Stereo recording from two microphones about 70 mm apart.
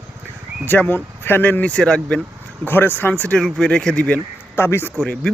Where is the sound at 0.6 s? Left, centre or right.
Left.